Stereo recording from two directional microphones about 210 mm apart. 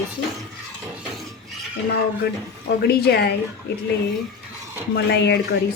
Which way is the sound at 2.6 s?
50° left (ahead or behind).